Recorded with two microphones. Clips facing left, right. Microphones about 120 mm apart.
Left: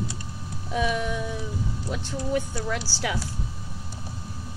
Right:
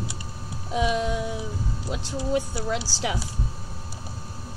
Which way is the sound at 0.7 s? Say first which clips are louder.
Right 2 dB; 20° right (ahead or behind).